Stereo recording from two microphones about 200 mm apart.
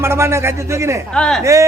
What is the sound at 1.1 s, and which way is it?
Speech, 5° left (ahead or behind).